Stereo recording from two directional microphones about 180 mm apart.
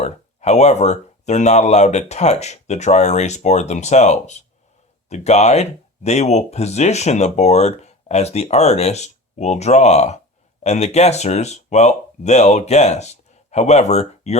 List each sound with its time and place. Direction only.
0.0 s speech: 40° left (ahead or behind)